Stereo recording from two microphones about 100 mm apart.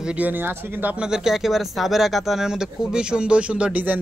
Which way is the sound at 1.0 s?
5° right (ahead or behind).